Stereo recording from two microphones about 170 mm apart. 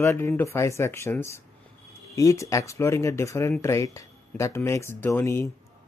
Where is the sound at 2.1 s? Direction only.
20° left (ahead or behind).